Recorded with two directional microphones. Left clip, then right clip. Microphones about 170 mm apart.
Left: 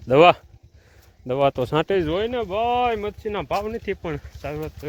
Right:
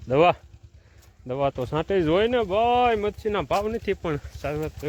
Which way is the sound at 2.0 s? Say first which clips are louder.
Right 3 dB; 55° right (ahead or behind).